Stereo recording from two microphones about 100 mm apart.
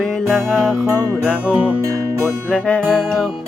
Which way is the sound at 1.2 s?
15° right (ahead or behind).